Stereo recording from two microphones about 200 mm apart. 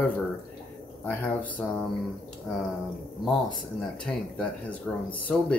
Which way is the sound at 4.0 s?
5° left (ahead or behind).